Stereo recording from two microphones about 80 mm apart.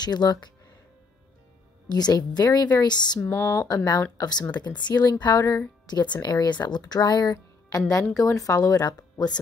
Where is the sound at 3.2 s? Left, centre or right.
Left.